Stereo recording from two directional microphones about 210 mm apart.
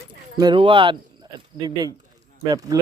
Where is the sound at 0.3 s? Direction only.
20° right (ahead or behind).